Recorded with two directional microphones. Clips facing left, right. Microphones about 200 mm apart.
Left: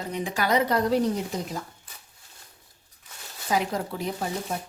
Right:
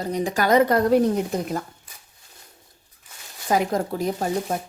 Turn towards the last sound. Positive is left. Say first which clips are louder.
# right 6 dB
turn(degrees=-45)  # may be behind; listen again after turning